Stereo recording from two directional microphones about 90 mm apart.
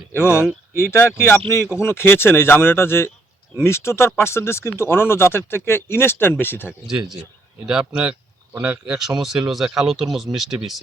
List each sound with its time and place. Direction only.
0.1 s speech: 25° left (ahead or behind)
6.7 s speech: 5° right (ahead or behind)